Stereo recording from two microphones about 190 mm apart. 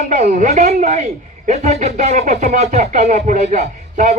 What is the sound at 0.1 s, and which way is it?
Speech, 40° right (ahead or behind).